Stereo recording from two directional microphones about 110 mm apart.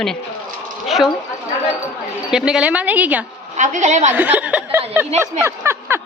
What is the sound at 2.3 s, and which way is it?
Speech, 5° right (ahead or behind).